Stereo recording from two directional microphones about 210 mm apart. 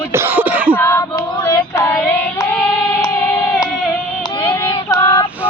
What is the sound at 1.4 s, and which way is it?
Child singing, 15° left (ahead or behind).